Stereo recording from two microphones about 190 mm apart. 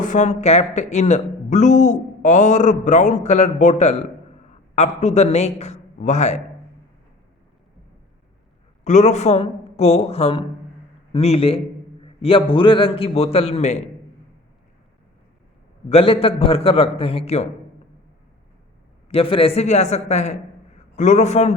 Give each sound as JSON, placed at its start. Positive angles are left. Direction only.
{"t": 0.0, "sound": "speech", "side_deg": 40}
{"t": 8.8, "sound": "speech", "side_deg": 40}
{"t": 15.9, "sound": "speech", "side_deg": 30}
{"t": 19.0, "sound": "a man's voice", "side_deg": 30}